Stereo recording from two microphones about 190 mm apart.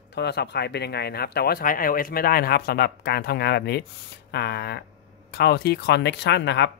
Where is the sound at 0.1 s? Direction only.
60° left (ahead or behind).